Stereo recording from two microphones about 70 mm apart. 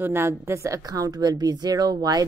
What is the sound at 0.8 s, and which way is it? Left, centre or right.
Speech, right.